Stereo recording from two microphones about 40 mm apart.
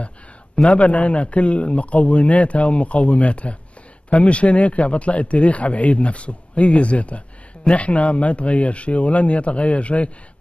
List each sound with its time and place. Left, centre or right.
0.6 s speech: left